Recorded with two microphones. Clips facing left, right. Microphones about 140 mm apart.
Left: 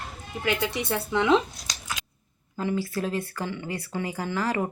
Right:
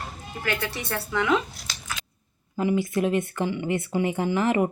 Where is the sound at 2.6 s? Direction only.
15° right (ahead or behind).